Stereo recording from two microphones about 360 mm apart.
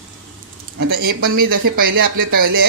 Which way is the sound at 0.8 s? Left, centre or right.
Right.